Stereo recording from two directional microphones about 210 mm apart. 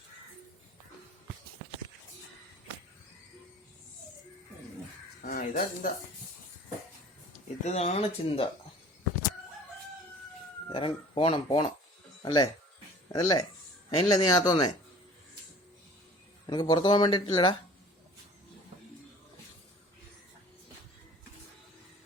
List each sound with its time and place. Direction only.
5.2 s speech: 40° left (ahead or behind)
7.6 s speech: 30° left (ahead or behind)
10.7 s speech: 25° left (ahead or behind)
16.5 s speech: 20° left (ahead or behind)